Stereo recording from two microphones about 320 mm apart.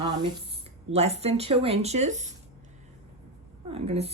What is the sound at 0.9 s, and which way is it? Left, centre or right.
Speech, centre.